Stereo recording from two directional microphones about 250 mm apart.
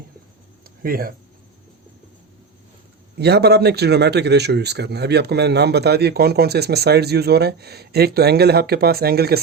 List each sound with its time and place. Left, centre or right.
0.8 s speech: right
3.2 s speech: right